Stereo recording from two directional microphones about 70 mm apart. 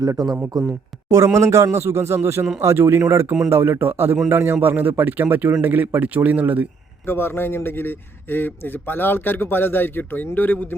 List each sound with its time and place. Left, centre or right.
0.0 s a man's voice: right
7.0 s speech: left